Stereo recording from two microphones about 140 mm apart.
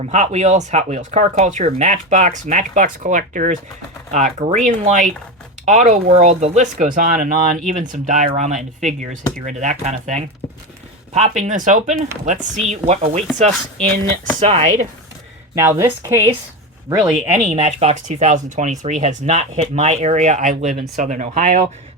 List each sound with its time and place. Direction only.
0.0 s speech: 55° right (ahead or behind)
6.7 s speech: 75° right (ahead or behind); by 13.2 s 45° right (ahead or behind)
14.4 s speech: 55° right (ahead or behind)
15.5 s a woman's voice: 20° right (ahead or behind)
17.3 s speech: 50° right (ahead or behind)
17.9 s speech: 60° right (ahead or behind)